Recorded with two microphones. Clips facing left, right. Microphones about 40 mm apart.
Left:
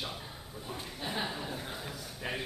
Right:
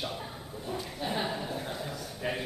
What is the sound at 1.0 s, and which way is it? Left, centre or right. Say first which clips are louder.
A man's voice: right 3 dB; centre.